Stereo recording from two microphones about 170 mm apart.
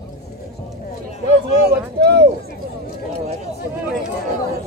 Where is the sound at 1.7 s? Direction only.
75° right (ahead or behind).